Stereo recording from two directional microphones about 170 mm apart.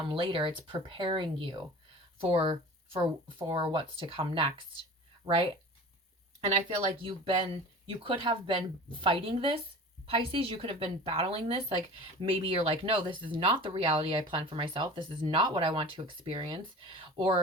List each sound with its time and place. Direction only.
0.1 s a woman's voice: 30° right (ahead or behind)
7.0 s a woman's voice: 30° right (ahead or behind)